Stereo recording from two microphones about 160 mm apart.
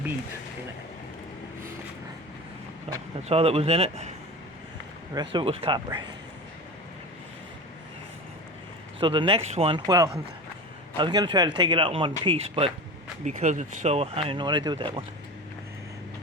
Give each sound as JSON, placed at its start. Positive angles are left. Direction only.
{"t": 2.9, "sound": "a sound", "side_deg": -40}
{"t": 3.2, "sound": "speech", "side_deg": -40}
{"t": 5.1, "sound": "speech", "side_deg": -30}
{"t": 9.0, "sound": "speech", "side_deg": -30}
{"t": 13.2, "sound": "speech", "side_deg": -50}